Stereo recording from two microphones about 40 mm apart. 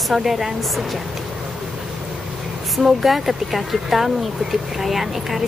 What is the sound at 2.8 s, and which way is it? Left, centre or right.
Speech, centre.